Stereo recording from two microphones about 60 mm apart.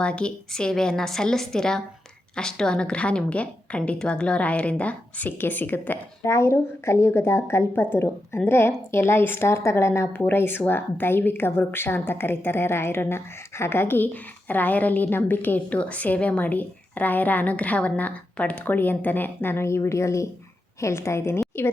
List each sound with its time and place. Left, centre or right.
0.0 s a woman's voice: centre; by 6.0 s left
6.2 s speech: left